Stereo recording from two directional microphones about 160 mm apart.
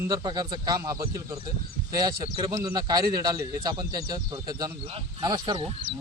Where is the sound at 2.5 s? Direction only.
25° right (ahead or behind).